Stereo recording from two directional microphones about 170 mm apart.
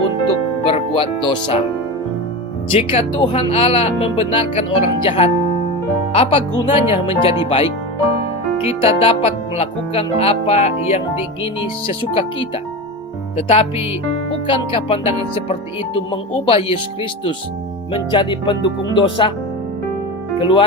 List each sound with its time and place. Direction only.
0.7 s speech: 30° left (ahead or behind)
2.7 s speech: 35° left (ahead or behind)
13.3 s speech: 35° left (ahead or behind)
20.4 s speech: 30° left (ahead or behind)